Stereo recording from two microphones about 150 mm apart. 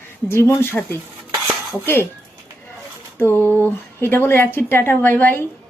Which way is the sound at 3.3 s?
15° right (ahead or behind).